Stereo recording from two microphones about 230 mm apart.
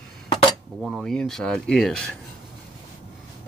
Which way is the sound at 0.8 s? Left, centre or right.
Centre.